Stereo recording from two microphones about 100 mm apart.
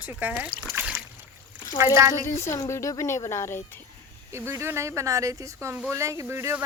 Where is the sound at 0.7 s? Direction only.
15° right (ahead or behind).